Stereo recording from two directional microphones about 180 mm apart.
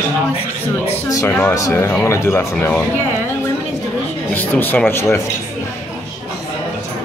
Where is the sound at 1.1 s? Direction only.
15° left (ahead or behind).